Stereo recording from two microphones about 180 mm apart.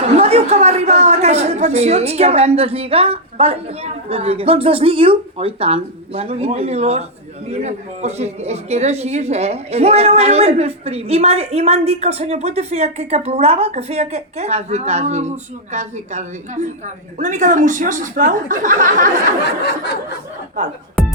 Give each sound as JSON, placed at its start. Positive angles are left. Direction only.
{"t": 0.0, "sound": "a woman's voice", "side_deg": -35}